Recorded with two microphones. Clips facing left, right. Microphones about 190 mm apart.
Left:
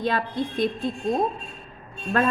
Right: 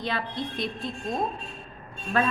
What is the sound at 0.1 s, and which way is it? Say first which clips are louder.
Speech: left 5 dB; 50° left (ahead or behind).